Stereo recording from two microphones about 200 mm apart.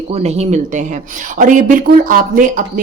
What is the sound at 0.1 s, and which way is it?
Speech, 30° right (ahead or behind).